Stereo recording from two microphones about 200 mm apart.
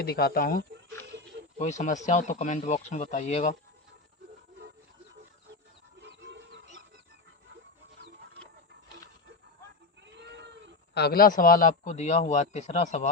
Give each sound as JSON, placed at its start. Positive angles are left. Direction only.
{"t": 0.0, "sound": "speech", "side_deg": 50}
{"t": 1.5, "sound": "a man's voice", "side_deg": 35}
{"t": 6.0, "sound": "chicken", "side_deg": -60}
{"t": 10.2, "sound": "goat", "side_deg": -60}
{"t": 10.9, "sound": "a man's voice", "side_deg": 50}